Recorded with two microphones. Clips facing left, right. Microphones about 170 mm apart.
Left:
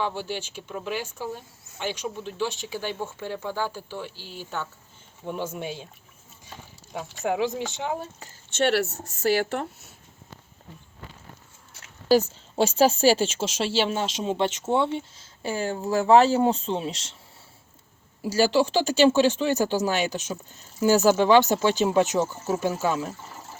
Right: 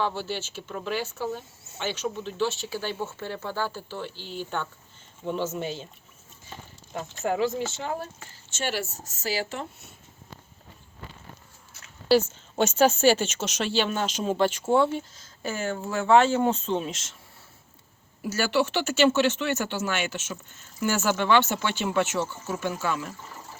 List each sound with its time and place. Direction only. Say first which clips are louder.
0.0 s speech: even; 15° left (ahead or behind)
7.3 s speech: even; 15° left (ahead or behind)
8.4 s speech: left 8 dB; 65° left (ahead or behind)
12.0 s speech: left 1 dB; 35° left (ahead or behind)
18.3 s speech: left 4 dB; 35° left (ahead or behind)